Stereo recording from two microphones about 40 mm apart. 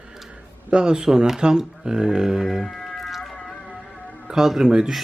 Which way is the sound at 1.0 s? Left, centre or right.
Centre.